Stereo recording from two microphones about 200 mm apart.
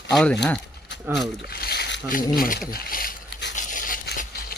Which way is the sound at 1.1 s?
10° right (ahead or behind).